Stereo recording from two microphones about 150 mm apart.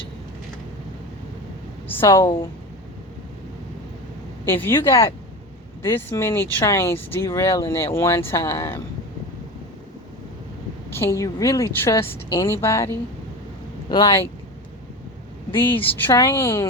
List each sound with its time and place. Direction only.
1.9 s speech: 15° left (ahead or behind)
4.4 s speech: 15° left (ahead or behind)
10.9 s speech: 15° left (ahead or behind)
13.9 s speech: 35° left (ahead or behind)
15.9 s speech: 10° left (ahead or behind)